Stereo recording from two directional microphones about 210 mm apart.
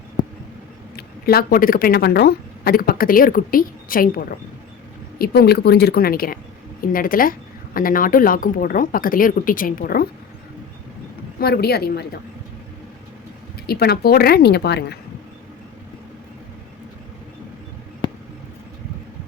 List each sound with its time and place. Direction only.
0.9 s a woman's voice: 45° left (ahead or behind)
11.3 s a woman's voice: 50° left (ahead or behind)
13.7 s a woman's voice: 50° left (ahead or behind)